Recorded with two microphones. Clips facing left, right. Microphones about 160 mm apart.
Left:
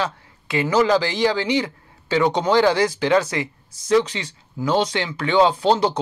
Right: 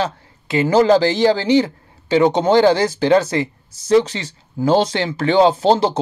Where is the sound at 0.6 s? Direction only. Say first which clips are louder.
Right 5 dB; 30° right (ahead or behind).